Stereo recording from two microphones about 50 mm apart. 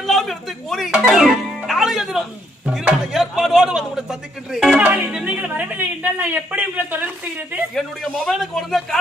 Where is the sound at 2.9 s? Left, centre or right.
Centre.